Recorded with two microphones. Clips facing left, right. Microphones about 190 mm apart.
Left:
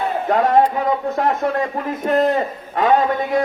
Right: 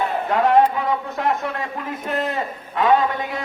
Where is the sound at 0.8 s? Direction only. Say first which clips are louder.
Left 4 dB; 40° left (ahead or behind).